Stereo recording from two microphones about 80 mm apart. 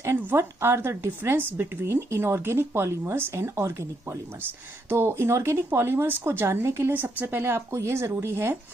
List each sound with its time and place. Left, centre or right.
0.3 s a woman's voice: right